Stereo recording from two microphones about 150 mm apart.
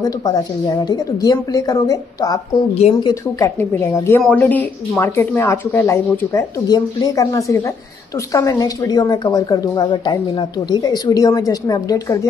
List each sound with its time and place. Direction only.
0.0 s a woman's voice: 25° left (ahead or behind)